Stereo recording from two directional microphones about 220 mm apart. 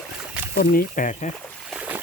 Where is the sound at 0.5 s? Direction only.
40° left (ahead or behind).